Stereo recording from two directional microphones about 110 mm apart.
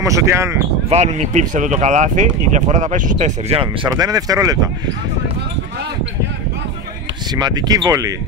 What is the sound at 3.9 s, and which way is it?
Speech, 35° right (ahead or behind).